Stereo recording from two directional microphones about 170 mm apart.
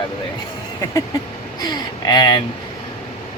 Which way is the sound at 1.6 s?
25° left (ahead or behind).